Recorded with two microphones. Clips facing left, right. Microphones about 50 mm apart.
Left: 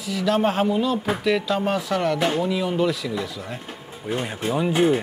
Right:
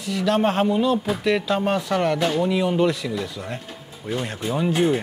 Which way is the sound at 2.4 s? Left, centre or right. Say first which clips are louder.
Right 2 dB; centre.